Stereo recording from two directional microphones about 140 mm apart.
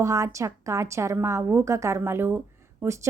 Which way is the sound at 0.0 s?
20° right (ahead or behind).